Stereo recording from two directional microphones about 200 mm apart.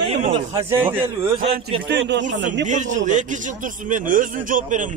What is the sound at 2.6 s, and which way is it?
A man's voice, 40° right (ahead or behind).